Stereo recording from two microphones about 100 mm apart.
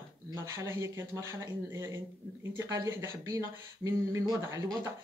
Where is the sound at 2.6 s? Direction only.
40° right (ahead or behind).